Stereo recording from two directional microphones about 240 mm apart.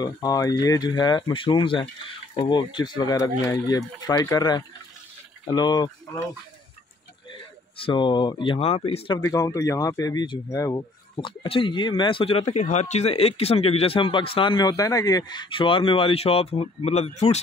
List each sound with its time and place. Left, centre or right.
0.0 s speech: centre
7.8 s speech: centre